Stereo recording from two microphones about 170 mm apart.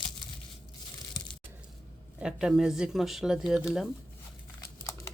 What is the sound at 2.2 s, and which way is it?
Speech, 5° right (ahead or behind).